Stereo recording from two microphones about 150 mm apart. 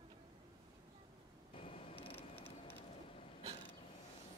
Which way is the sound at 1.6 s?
40° left (ahead or behind).